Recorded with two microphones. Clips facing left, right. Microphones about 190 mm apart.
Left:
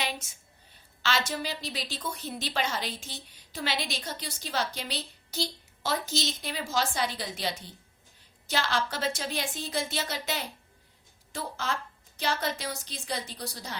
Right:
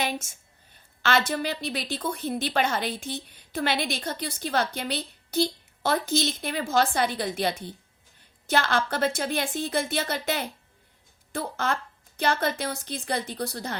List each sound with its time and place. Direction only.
0.0 s a woman's voice: 45° right (ahead or behind)